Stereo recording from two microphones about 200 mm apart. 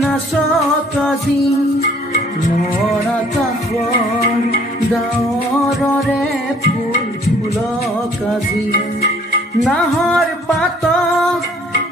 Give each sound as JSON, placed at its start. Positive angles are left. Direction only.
{"t": 1.8, "sound": "music", "side_deg": 40}
{"t": 9.7, "sound": "music", "side_deg": 0}